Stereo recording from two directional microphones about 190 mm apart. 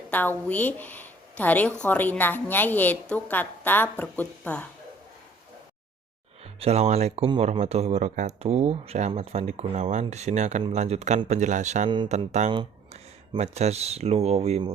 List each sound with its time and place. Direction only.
0.1 s a woman's voice: 10° left (ahead or behind)
6.6 s speech: 35° right (ahead or behind)